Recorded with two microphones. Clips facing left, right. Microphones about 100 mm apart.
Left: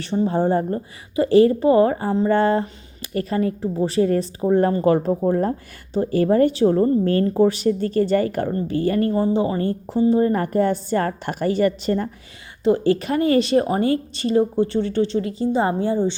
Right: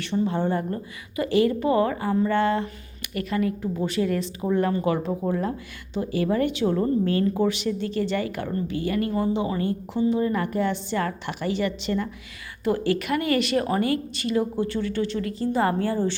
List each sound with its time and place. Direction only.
0.0 s a woman's voice: 35° left (ahead or behind)
12.6 s a woman's voice: 30° left (ahead or behind)